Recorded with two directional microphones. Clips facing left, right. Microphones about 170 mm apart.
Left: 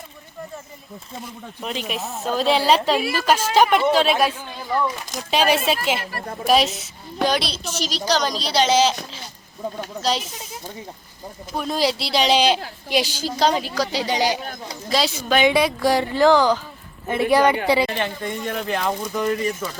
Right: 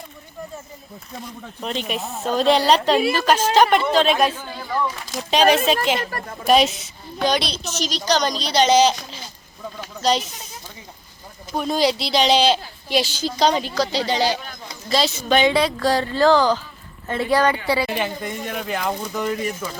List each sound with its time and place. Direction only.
1.6 s a woman's voice: 5° left (ahead or behind)
10.0 s a woman's voice: 5° left (ahead or behind)
11.5 s a woman's voice: centre (ahead or behind)
17.8 s speech: 10° right (ahead or behind)